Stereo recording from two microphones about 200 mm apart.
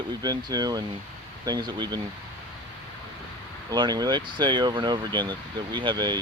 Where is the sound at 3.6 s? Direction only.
20° right (ahead or behind).